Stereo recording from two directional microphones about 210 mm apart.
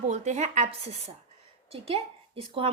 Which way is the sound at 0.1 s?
35° right (ahead or behind).